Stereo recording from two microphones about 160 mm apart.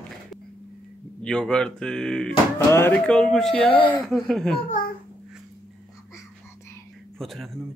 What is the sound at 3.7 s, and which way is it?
Speech, 35° left (ahead or behind).